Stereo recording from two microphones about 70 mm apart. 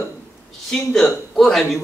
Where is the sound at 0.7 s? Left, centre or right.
Centre.